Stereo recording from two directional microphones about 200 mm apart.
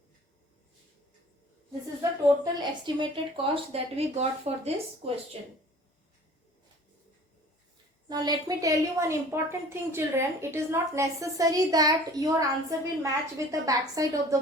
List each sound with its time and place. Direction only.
2.0 s speech: 20° right (ahead or behind)
8.1 s a woman's voice: 20° right (ahead or behind)